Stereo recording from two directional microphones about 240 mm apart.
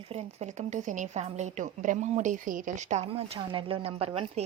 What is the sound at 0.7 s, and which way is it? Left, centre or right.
A woman's voice, right.